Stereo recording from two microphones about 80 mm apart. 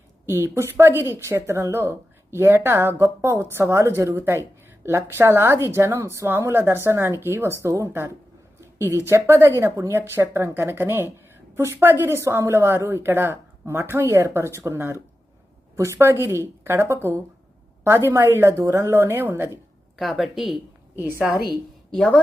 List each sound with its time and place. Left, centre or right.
0.3 s a woman's voice: right
20.0 s speech: centre
20.9 s a woman's voice: right